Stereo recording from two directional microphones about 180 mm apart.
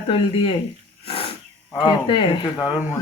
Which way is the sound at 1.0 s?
30° left (ahead or behind).